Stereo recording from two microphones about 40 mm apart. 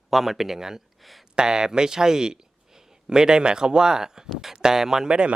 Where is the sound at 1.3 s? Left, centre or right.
Centre.